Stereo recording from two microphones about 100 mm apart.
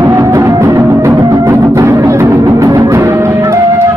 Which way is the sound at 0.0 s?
35° right (ahead or behind).